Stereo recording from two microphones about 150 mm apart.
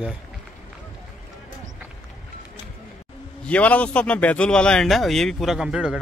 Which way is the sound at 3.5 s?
10° left (ahead or behind).